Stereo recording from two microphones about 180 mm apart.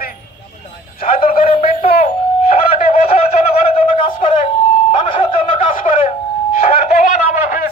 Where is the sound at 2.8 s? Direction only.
35° left (ahead or behind).